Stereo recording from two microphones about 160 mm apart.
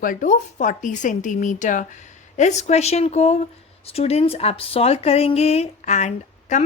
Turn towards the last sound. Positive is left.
turn(degrees=45)  # may be behind; listen again after turning